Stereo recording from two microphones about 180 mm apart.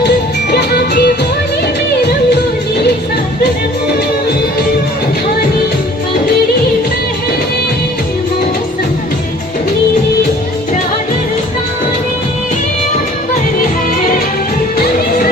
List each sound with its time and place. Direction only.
0.5 s music: 65° left (ahead or behind)